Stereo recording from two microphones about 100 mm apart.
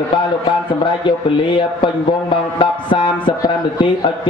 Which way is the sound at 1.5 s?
55° left (ahead or behind).